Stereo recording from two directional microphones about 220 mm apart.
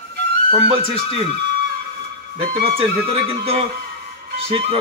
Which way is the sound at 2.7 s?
25° right (ahead or behind).